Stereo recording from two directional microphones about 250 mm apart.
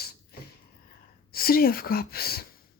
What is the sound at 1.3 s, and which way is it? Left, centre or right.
Speech, left.